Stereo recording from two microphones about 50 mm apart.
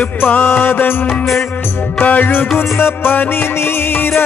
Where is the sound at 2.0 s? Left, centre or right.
Left.